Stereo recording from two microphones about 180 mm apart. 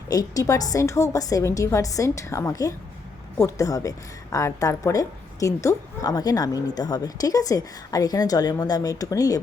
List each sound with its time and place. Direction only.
0.1 s a woman's voice: 20° left (ahead or behind)